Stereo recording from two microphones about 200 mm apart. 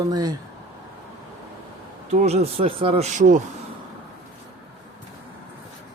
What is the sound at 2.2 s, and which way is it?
Speech, 30° right (ahead or behind).